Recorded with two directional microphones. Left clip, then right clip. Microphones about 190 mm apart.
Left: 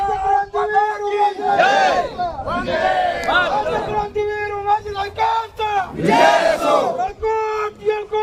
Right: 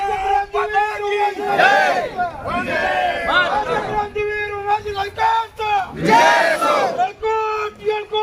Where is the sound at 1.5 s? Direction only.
50° left (ahead or behind).